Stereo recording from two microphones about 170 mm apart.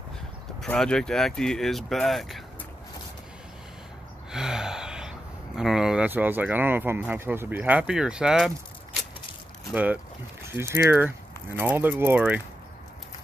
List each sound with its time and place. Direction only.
0.6 s speech: 5° left (ahead or behind)
4.3 s gasp: 5° right (ahead or behind)
5.6 s speech: 5° right (ahead or behind)
9.7 s speech: 10° right (ahead or behind)